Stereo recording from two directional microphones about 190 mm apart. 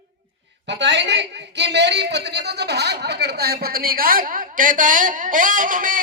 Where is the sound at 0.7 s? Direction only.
65° right (ahead or behind).